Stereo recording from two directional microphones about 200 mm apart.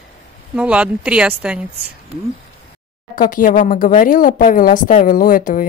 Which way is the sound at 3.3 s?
45° left (ahead or behind).